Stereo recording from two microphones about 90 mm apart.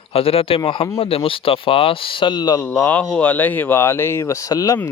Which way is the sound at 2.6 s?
20° left (ahead or behind).